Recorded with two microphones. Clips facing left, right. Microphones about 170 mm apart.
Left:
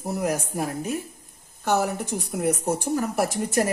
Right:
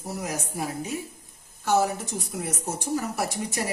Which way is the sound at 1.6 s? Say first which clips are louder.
Even; 60° left (ahead or behind).